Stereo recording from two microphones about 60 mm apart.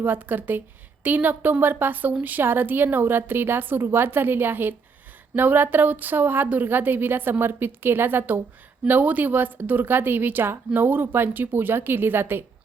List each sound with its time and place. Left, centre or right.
0.0 s a woman's voice: right